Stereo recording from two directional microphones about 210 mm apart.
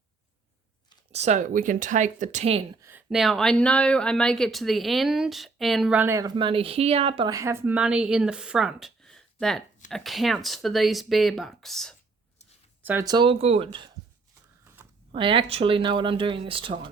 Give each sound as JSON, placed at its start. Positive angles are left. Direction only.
{"t": 1.1, "sound": "speech", "side_deg": -35}
{"t": 2.8, "sound": "speech", "side_deg": -5}
{"t": 12.8, "sound": "speech", "side_deg": -10}
{"t": 15.1, "sound": "speech", "side_deg": -25}